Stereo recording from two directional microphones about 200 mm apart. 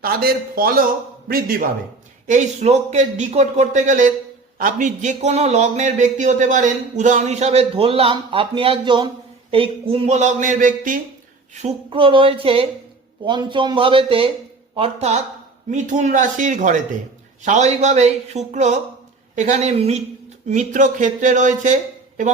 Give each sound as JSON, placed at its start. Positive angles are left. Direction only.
{"t": 0.0, "sound": "a man's voice", "side_deg": -50}
{"t": 11.5, "sound": "speech", "side_deg": -30}